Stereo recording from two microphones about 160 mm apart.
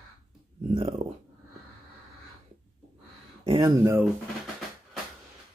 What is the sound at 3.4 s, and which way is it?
Speech, 25° right (ahead or behind).